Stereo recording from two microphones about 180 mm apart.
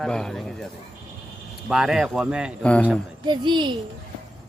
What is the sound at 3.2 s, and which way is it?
Speech, 25° right (ahead or behind).